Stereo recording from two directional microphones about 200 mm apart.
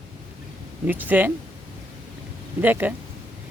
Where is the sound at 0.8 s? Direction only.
10° right (ahead or behind).